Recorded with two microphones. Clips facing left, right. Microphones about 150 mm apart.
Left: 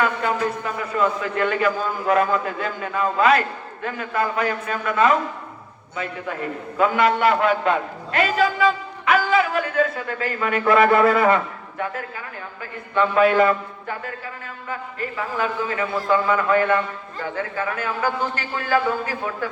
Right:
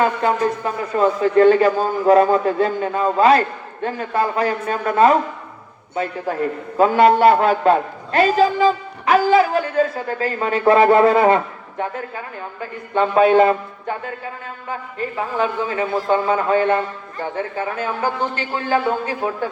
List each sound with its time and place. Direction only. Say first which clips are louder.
0.0 s a man's voice: right 4 dB; 35° right (ahead or behind)